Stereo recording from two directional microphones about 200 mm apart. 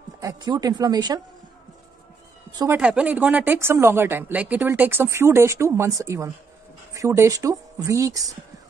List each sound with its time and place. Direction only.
0.2 s speech: 20° right (ahead or behind)
2.5 s speech: 15° right (ahead or behind)
2.8 s speech: 5° right (ahead or behind)